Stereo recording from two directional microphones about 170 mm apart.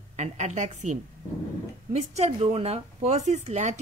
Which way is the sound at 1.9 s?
40° right (ahead or behind).